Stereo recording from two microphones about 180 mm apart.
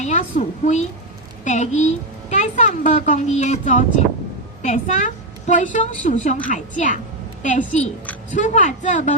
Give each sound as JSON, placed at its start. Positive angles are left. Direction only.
{"t": 0.0, "sound": "a woman's voice", "side_deg": 40}